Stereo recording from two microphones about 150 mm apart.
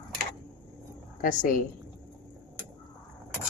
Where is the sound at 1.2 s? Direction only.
65° left (ahead or behind).